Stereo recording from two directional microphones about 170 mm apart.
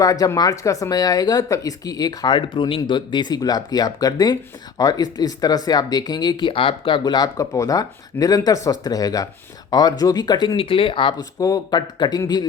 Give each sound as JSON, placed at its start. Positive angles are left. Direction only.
{"t": 0.0, "sound": "speech", "side_deg": 20}